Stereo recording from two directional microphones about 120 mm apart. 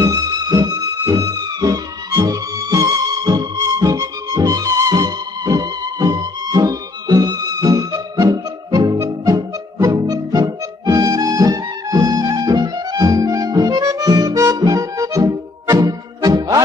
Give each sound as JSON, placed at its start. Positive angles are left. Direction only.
{"t": 0.0, "sound": "music", "side_deg": -30}